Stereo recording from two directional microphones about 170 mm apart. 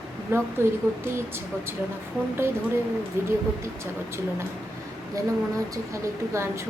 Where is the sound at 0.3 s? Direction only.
15° right (ahead or behind).